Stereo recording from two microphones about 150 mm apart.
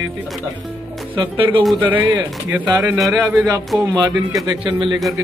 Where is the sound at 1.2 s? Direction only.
35° right (ahead or behind).